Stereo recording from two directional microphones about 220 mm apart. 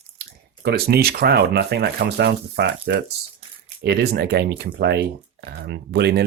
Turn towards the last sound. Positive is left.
turn(degrees=-50)  # may be behind; listen again after turning